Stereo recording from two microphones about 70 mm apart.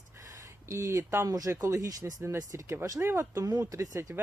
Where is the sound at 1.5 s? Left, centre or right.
Right.